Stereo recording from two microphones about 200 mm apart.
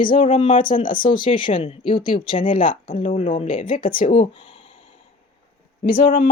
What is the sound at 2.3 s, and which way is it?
Speech, 40° left (ahead or behind).